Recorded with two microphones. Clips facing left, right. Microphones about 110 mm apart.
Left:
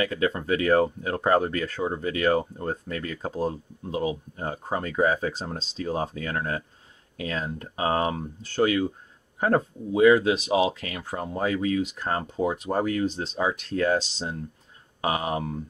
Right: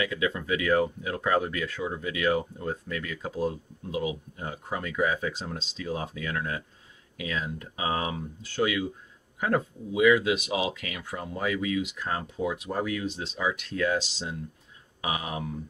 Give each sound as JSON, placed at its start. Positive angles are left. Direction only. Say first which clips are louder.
{"t": 0.0, "sound": "speech", "louder": "left 3 dB", "side_deg": 40}